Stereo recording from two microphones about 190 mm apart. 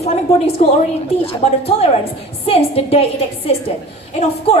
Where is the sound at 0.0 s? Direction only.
35° left (ahead or behind).